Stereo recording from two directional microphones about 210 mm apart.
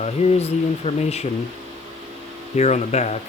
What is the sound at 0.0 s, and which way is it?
Speech, 30° left (ahead or behind).